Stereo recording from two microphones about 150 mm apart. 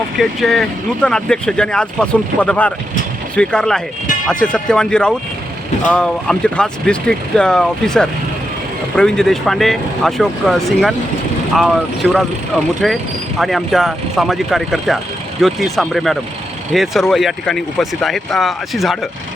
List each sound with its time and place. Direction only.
0.2 s speech: centre (ahead or behind)